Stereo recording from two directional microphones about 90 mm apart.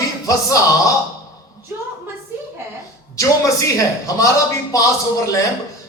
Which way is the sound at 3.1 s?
35° left (ahead or behind).